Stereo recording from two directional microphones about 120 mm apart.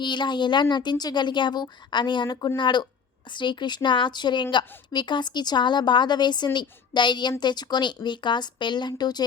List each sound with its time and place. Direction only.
0.0 s a woman's voice: 40° left (ahead or behind)